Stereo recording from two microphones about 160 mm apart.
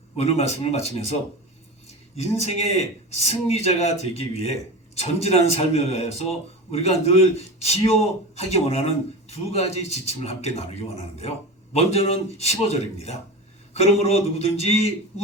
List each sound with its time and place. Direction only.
0.2 s a man's voice: 40° left (ahead or behind)
2.1 s a man's voice: 40° left (ahead or behind)